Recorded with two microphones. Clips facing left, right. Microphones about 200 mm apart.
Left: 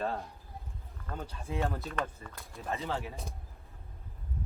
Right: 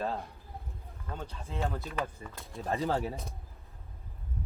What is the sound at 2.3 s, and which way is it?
Speech, 35° right (ahead or behind).